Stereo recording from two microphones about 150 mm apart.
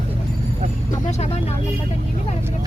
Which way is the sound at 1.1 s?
45° left (ahead or behind).